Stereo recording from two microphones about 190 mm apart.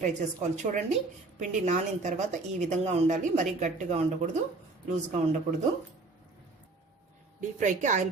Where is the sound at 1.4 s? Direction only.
40° right (ahead or behind).